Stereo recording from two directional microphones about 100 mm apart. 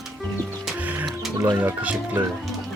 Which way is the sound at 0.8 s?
15° right (ahead or behind).